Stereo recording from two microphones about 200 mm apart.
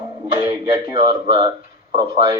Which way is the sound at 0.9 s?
25° right (ahead or behind).